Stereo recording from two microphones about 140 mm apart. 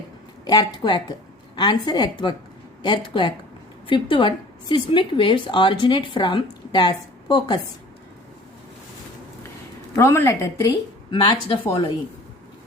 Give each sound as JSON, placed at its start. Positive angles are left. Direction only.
{"t": 0.4, "sound": "a woman's voice", "side_deg": 30}
{"t": 10.0, "sound": "a woman's voice", "side_deg": 20}
{"t": 11.1, "sound": "a woman's voice", "side_deg": 35}